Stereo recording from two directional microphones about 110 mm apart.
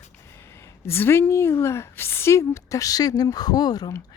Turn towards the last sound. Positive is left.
turn(degrees=35)  # may be behind; listen again after turning